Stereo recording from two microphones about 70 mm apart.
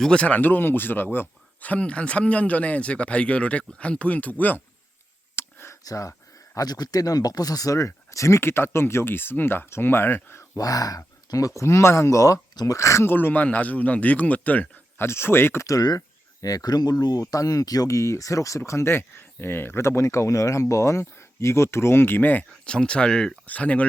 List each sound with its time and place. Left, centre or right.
0.0 s speech: centre
5.4 s a sound: left
5.8 s a sound: left
6.7 s speech: left
10.6 s speech: left
13.1 s speech: left
15.0 s speech: left
15.6 s speech: left
22.7 s speech: centre